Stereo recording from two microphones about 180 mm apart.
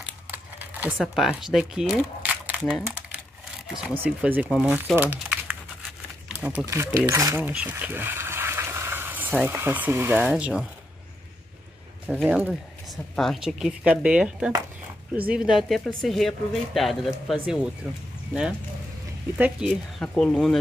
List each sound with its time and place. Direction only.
0.0 s crumpling: 10° right (ahead or behind)
0.9 s speech: centre (ahead or behind)
3.7 s speech: 5° right (ahead or behind)
4.9 s crumpling: 10° right (ahead or behind)
6.2 s a sound: 10° right (ahead or behind)
6.6 s speech: 15° right (ahead or behind)
12.1 s speech: centre (ahead or behind)
19.3 s speech: 10° right (ahead or behind)
20.0 s speech: 5° left (ahead or behind)